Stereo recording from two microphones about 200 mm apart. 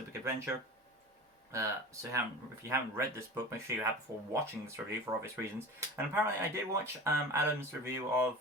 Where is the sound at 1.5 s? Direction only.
15° right (ahead or behind).